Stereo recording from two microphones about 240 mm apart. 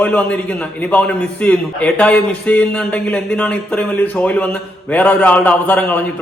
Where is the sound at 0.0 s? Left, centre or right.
Centre.